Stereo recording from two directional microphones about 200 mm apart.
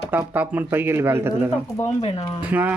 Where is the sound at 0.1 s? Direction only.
10° right (ahead or behind).